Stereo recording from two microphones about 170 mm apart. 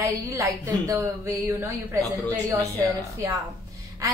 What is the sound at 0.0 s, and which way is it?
A woman's voice, 20° right (ahead or behind).